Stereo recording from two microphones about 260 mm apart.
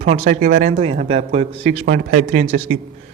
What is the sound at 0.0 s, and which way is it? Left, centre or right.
A man's voice, right.